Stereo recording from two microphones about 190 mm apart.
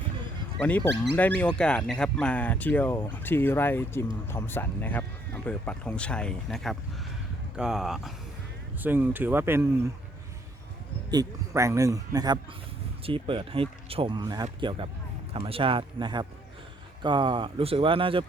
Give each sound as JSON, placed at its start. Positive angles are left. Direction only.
{"t": 0.6, "sound": "speech", "side_deg": 5}
{"t": 11.1, "sound": "speech", "side_deg": -15}